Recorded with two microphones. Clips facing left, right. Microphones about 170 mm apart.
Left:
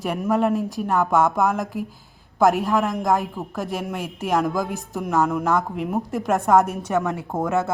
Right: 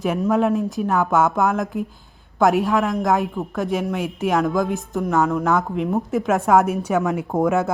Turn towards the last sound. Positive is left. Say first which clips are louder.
# right 4 dB
turn(degrees=-15)  # may be behind; listen again after turning